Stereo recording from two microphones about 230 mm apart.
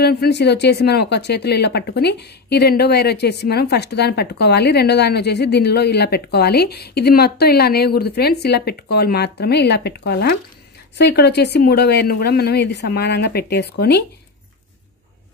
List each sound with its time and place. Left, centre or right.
0.0 s speech: left